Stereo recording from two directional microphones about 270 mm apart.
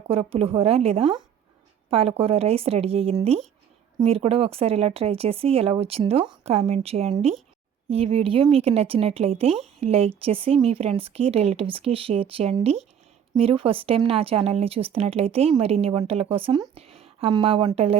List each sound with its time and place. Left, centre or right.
0.1 s speech: right